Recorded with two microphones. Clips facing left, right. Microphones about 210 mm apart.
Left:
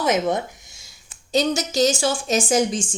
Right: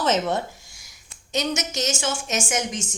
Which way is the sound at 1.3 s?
35° left (ahead or behind).